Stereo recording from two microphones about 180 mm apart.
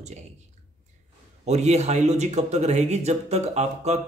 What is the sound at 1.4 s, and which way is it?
Speech, 40° right (ahead or behind).